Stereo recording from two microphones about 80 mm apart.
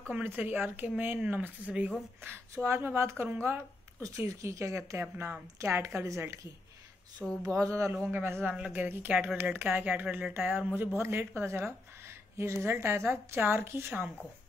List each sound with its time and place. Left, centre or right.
0.2 s speech: right
2.2 s a woman's voice: right
7.4 s a woman's voice: right
7.9 s a woman's voice: right